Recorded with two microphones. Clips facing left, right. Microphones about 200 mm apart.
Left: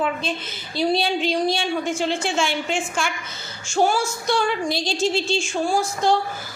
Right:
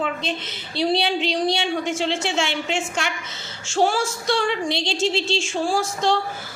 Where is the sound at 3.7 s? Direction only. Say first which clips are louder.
Even; 90° right.